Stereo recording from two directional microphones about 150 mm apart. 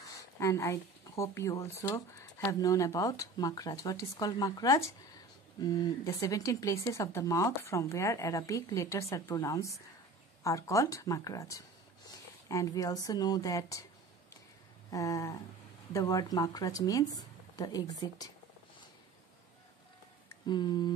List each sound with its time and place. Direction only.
0.2 s speech: 20° left (ahead or behind)
14.9 s speech: 20° left (ahead or behind)
20.4 s speech: 30° left (ahead or behind)